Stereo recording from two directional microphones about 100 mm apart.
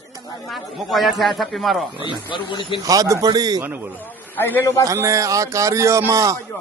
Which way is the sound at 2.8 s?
35° right (ahead or behind).